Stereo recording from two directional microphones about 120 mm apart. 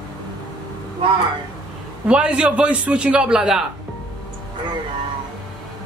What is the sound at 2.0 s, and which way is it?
A man's voice, 10° right (ahead or behind).